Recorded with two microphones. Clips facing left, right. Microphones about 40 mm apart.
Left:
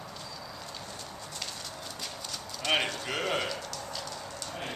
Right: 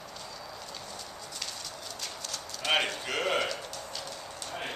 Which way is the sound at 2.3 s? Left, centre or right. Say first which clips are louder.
Right 1 dB; centre.